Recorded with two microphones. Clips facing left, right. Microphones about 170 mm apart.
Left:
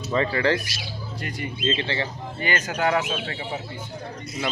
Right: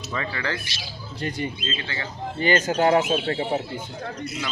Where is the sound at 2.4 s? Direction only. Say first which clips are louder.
Right 5 dB; 30° right (ahead or behind).